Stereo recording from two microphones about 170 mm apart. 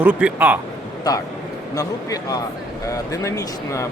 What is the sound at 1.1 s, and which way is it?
Speech, 20° left (ahead or behind).